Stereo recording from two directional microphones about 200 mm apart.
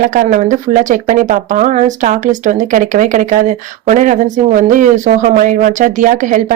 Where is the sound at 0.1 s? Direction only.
40° right (ahead or behind).